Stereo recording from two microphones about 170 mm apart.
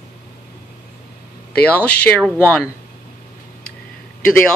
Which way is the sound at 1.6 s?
10° left (ahead or behind).